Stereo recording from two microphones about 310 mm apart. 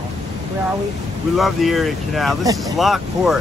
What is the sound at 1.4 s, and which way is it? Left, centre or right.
Speech, centre.